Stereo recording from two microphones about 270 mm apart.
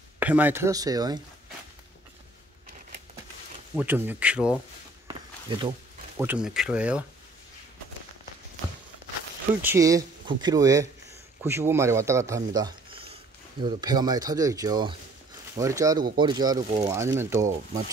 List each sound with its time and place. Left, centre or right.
0.2 s speech: centre
3.7 s speech: centre
5.0 s walk: centre
6.1 s speech: centre
9.6 s speech: centre